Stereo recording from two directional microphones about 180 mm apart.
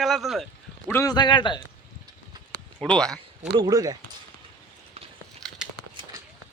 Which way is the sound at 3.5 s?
20° right (ahead or behind).